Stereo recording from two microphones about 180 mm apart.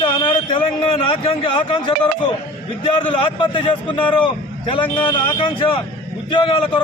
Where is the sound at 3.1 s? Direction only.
30° left (ahead or behind).